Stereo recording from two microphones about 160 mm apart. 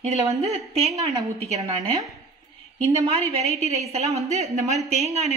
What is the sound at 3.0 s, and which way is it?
A woman's voice, 40° right (ahead or behind).